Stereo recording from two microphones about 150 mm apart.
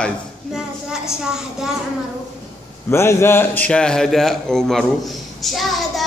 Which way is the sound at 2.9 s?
15° left (ahead or behind).